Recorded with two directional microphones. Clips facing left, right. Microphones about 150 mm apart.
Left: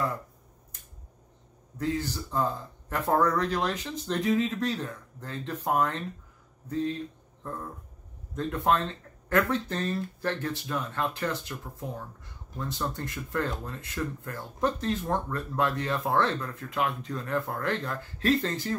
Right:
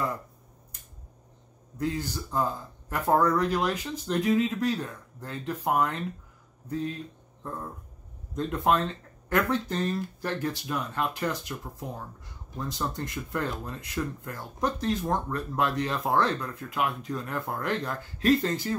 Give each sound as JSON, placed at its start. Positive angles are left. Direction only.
{"t": 1.8, "sound": "speech", "side_deg": -15}
{"t": 8.5, "sound": "speech", "side_deg": -15}
{"t": 12.5, "sound": "speech", "side_deg": -15}